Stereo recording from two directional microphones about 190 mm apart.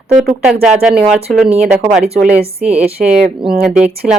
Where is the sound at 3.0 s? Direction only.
45° right (ahead or behind).